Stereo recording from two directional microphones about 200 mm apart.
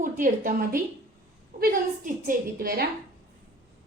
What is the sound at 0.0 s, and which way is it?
Speech, 45° right (ahead or behind).